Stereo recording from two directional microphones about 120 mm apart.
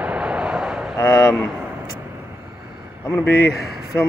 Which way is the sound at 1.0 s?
25° left (ahead or behind).